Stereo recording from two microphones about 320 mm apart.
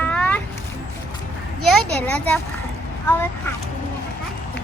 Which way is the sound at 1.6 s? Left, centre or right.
Centre.